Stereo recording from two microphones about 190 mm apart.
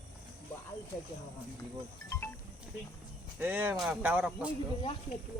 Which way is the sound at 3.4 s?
10° right (ahead or behind).